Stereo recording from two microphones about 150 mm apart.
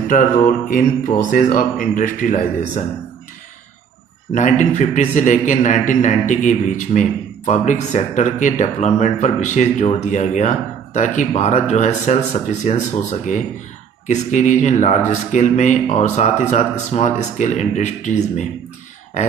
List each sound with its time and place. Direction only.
0.1 s speech: 65° left (ahead or behind)
4.3 s a man's voice: 55° left (ahead or behind)